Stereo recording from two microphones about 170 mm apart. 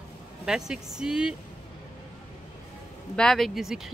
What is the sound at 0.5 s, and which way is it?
Speech, 5° right (ahead or behind).